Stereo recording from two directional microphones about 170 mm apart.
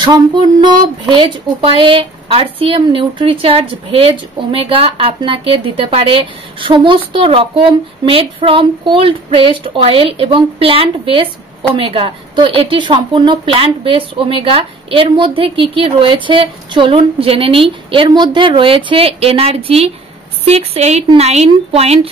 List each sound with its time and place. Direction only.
0.0 s speech: 25° right (ahead or behind)